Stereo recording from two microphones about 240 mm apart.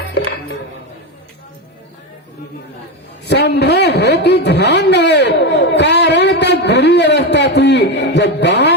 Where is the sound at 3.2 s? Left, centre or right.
Left.